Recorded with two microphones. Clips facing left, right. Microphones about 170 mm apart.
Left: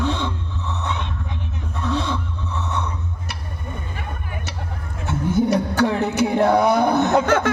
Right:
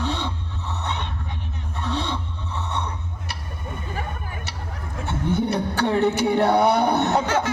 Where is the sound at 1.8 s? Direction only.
30° right (ahead or behind).